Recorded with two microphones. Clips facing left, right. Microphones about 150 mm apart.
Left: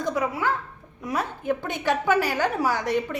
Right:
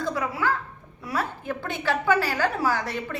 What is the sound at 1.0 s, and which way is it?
A woman's voice, 20° left (ahead or behind).